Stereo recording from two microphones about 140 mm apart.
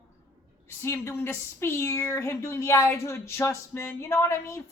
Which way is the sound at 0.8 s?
15° left (ahead or behind).